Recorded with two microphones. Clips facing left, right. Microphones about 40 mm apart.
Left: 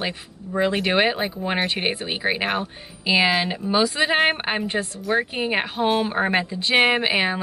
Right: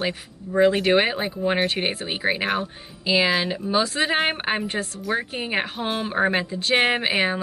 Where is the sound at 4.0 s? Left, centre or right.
Centre.